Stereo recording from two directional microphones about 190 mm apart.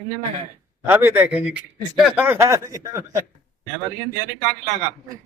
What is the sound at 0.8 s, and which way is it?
Speech, 10° right (ahead or behind).